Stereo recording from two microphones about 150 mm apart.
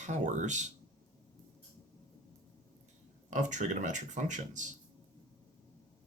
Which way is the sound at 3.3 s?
55° right (ahead or behind).